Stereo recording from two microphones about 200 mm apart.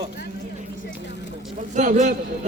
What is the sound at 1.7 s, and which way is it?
Speech, 35° right (ahead or behind).